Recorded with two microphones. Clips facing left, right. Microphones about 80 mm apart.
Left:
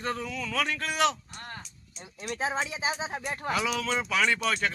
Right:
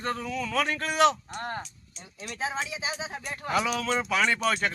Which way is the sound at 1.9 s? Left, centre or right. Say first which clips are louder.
Left 1 dB; centre.